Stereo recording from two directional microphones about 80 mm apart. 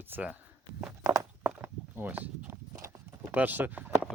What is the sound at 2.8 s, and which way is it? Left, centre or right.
Clip-clop, right.